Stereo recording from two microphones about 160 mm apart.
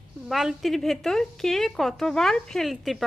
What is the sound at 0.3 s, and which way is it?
A woman's voice, centre (ahead or behind).